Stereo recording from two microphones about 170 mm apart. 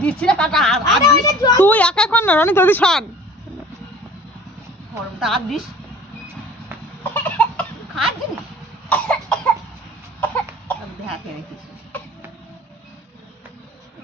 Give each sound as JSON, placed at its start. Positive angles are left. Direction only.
{"t": 0.0, "sound": "a woman's voice", "side_deg": 5}
{"t": 1.0, "sound": "a woman's voice", "side_deg": 20}
{"t": 1.7, "sound": "a woman's voice", "side_deg": 5}
{"t": 5.2, "sound": "a woman's voice", "side_deg": 0}
{"t": 7.0, "sound": "cough", "side_deg": 10}